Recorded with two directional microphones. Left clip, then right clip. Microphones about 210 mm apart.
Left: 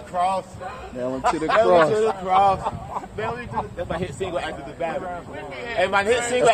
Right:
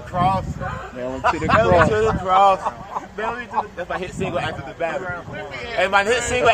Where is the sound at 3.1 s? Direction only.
15° left (ahead or behind).